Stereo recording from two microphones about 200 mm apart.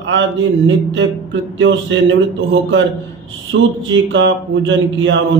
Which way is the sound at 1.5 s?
70° right (ahead or behind).